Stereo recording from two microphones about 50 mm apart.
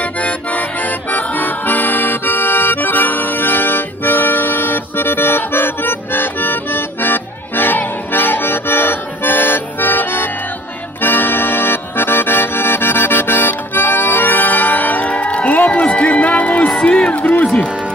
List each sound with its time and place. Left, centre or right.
0.2 s music: left
11.0 s accordion: left
15.7 s a sound: left
17.1 s music: left